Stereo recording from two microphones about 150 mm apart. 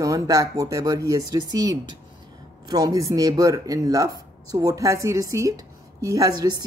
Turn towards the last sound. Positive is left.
turn(degrees=-25)  # may be behind; listen again after turning